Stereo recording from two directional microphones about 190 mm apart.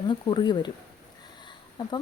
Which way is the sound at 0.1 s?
25° left (ahead or behind).